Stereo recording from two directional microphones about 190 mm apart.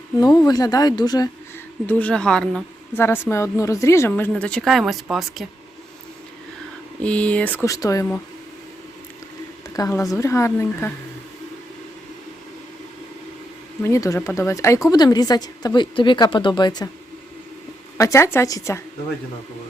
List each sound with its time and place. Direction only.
0.2 s a woman's voice: 20° left (ahead or behind)
1.9 s a woman's voice: 5° left (ahead or behind)
7.0 s speech: 5° left (ahead or behind)
9.7 s speech: 20° left (ahead or behind)
13.8 s a woman's voice: 15° left (ahead or behind)
17.9 s speech: 15° left (ahead or behind)